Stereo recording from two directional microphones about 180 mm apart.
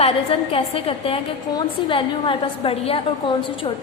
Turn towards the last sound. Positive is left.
turn(degrees=30)  # may be behind; listen again after turning